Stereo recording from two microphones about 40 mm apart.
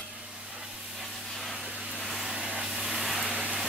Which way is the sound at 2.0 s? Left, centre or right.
Centre.